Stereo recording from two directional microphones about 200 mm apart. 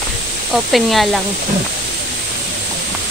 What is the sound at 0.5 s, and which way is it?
Speech, centre (ahead or behind).